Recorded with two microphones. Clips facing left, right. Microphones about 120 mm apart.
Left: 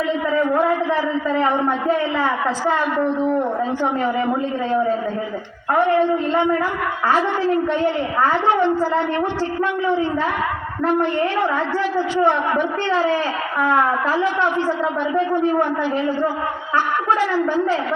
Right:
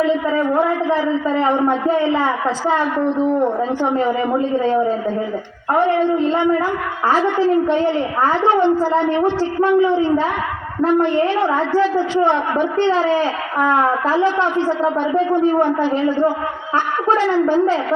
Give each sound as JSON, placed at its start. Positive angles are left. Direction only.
{"t": 1.4, "sound": "a woman's voice", "side_deg": -25}
{"t": 5.7, "sound": "a woman's voice", "side_deg": -30}